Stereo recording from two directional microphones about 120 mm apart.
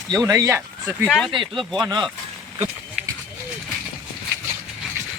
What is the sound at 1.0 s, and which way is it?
Speech, 5° left (ahead or behind).